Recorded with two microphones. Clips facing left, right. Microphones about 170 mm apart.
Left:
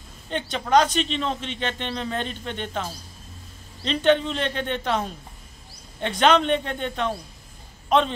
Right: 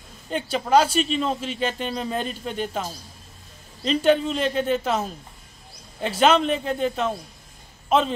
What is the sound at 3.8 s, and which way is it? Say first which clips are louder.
A man's voice: right 1 dB; 5° right (ahead or behind).